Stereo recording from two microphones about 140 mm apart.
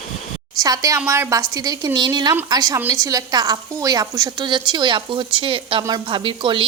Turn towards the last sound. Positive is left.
turn(degrees=-35)  # may be behind; listen again after turning